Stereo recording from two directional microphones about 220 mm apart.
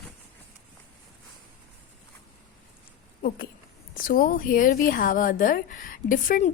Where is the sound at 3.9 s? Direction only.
40° left (ahead or behind).